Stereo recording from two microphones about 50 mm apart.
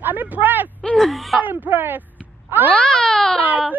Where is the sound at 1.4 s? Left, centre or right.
Right.